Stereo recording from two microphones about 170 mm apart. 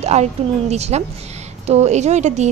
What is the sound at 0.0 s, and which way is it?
A woman's voice, 40° right (ahead or behind).